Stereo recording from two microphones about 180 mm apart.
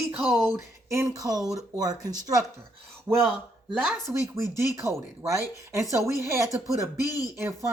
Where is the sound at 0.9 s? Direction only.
15° right (ahead or behind).